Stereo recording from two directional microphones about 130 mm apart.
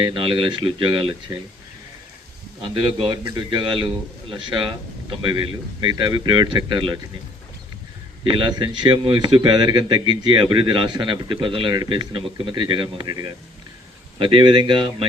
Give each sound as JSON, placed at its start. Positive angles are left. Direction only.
{"t": 0.0, "sound": "a man's voice", "side_deg": -40}
{"t": 2.6, "sound": "a man's voice", "side_deg": -40}
{"t": 8.2, "sound": "a man's voice", "side_deg": -40}